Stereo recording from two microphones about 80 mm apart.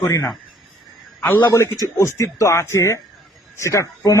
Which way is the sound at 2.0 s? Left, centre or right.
Left.